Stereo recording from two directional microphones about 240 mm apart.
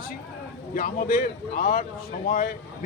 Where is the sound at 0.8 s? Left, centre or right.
Left.